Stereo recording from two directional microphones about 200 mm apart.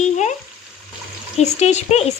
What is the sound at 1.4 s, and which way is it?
Speech, 35° left (ahead or behind).